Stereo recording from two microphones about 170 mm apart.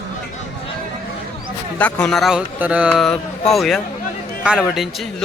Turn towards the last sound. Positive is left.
turn(degrees=0)  # may be behind; listen again after turning